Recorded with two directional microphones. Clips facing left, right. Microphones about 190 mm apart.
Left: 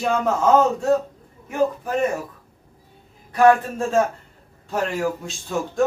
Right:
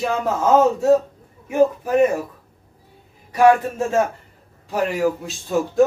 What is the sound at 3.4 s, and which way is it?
A man's voice, 10° right (ahead or behind).